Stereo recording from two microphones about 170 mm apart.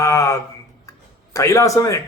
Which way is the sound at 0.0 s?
20° left (ahead or behind).